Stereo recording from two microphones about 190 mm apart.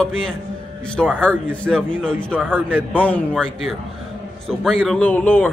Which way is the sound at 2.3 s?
10° right (ahead or behind).